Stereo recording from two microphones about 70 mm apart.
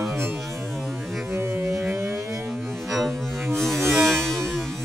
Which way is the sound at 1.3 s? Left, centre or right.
Right.